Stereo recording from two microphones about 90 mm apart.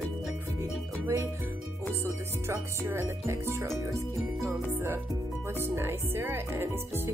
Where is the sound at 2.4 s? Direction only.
30° right (ahead or behind).